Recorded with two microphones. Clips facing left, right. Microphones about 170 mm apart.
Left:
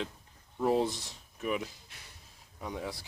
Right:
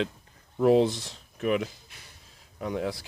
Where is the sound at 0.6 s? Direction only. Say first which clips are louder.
Right 7 dB; 90° right.